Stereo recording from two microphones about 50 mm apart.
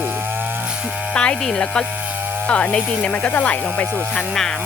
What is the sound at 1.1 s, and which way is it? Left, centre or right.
Speech, centre.